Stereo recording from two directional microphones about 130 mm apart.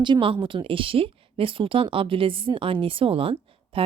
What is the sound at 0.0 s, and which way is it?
A woman's voice, 40° right (ahead or behind).